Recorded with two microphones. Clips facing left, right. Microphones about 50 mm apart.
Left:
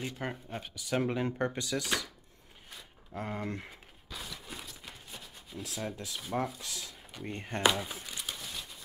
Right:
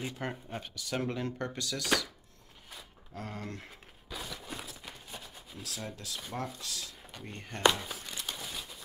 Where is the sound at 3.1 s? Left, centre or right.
Centre.